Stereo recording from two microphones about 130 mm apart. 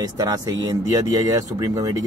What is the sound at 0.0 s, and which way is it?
Speech, 30° right (ahead or behind).